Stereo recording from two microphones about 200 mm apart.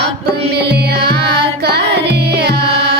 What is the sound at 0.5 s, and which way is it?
Music, 55° right (ahead or behind).